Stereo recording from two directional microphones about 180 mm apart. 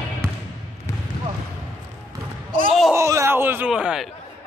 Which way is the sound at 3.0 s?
15° right (ahead or behind).